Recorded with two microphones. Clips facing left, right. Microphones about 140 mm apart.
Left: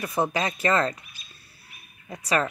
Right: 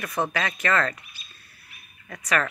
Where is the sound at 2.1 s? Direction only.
30° left (ahead or behind).